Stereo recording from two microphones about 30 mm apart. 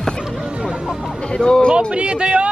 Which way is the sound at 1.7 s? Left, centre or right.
Right.